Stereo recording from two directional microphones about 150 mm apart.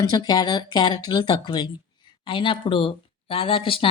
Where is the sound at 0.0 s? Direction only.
25° left (ahead or behind).